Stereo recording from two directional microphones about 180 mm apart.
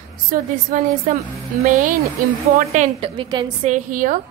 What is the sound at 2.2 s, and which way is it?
Speech, 50° right (ahead or behind).